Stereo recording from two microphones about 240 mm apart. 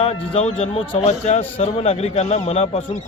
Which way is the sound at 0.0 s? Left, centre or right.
Left.